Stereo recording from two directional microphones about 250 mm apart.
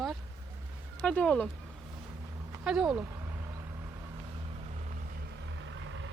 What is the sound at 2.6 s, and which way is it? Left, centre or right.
Speech, centre.